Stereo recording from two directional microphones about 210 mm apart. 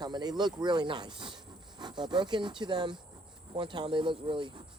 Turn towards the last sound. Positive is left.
turn(degrees=-25)  # may be behind; listen again after turning